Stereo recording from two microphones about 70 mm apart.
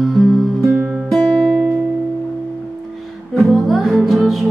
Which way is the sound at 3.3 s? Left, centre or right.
Centre.